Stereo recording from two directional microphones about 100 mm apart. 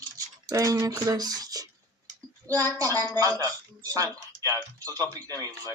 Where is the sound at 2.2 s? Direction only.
30° right (ahead or behind).